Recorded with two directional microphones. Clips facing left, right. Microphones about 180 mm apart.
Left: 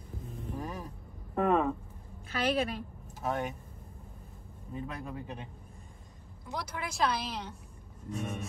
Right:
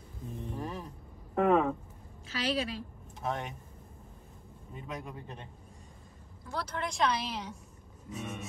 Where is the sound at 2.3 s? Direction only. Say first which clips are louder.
Left 2 dB; 55° left (ahead or behind).